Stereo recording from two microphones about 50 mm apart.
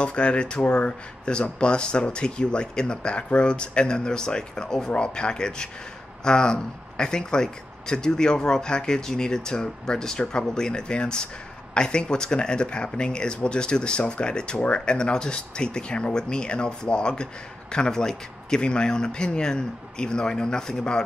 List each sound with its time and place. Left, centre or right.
0.0 s speech: left